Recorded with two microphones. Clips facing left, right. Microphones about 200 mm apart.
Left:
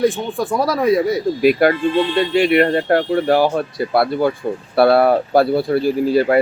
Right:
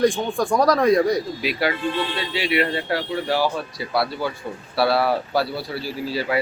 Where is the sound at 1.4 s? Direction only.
50° left (ahead or behind).